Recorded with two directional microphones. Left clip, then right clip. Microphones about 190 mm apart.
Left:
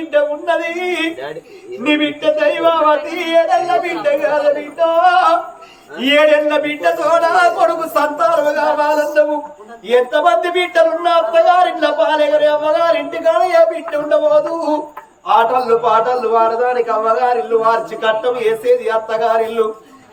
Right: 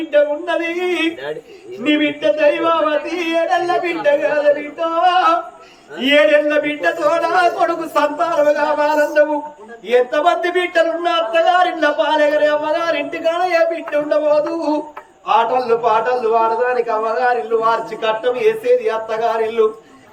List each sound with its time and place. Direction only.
0.1 s a man's voice: 20° left (ahead or behind)